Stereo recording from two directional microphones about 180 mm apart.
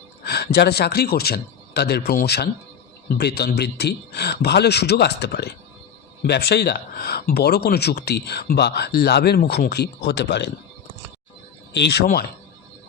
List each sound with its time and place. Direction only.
0.3 s speech: 65° left (ahead or behind)
11.7 s speech: 70° left (ahead or behind)